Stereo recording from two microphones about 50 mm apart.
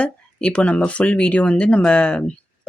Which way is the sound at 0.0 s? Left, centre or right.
Left.